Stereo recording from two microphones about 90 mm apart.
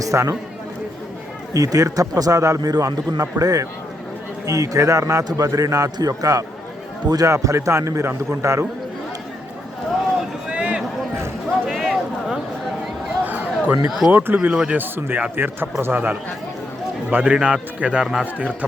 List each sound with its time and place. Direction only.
0.0 s a man's voice: 35° right (ahead or behind)
1.5 s a man's voice: 40° right (ahead or behind)
10.2 s vehicle: 15° right (ahead or behind)
11.6 s a sound: centre (ahead or behind)
13.2 s a sound: 20° right (ahead or behind)
14.1 s speech: 20° right (ahead or behind)
14.5 s speech: 10° right (ahead or behind)
14.8 s speech: 25° right (ahead or behind); by 18.3 s 5° right (ahead or behind)